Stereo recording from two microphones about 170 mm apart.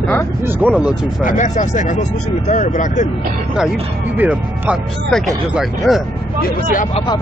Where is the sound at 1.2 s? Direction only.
50° left (ahead or behind).